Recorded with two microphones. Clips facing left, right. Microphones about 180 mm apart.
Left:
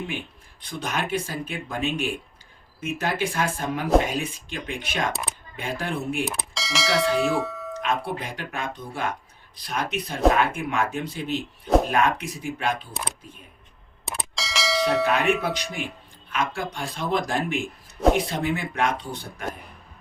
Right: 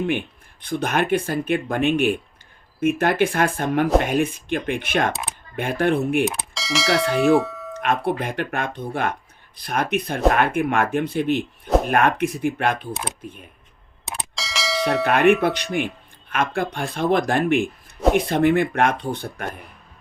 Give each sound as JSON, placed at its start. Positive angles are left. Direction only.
{"t": 0.6, "sound": "speech", "side_deg": -55}
{"t": 6.2, "sound": "speech", "side_deg": 0}
{"t": 7.8, "sound": "speech", "side_deg": -55}
{"t": 12.9, "sound": "speech", "side_deg": 0}
{"t": 14.3, "sound": "bell", "side_deg": 0}
{"t": 15.0, "sound": "speech", "side_deg": -60}